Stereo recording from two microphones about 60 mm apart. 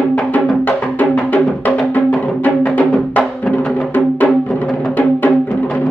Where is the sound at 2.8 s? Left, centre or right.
Left.